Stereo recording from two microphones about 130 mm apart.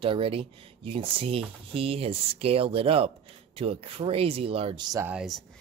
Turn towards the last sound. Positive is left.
turn(degrees=0)  # may be behind; listen again after turning